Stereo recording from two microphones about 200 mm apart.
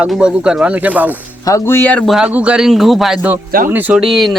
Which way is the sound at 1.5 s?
15° left (ahead or behind).